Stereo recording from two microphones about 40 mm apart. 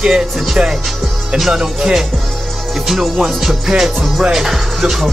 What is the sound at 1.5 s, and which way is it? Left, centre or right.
Music, centre.